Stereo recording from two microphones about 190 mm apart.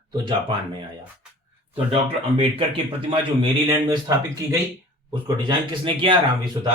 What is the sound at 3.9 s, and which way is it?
Speech, 20° right (ahead or behind).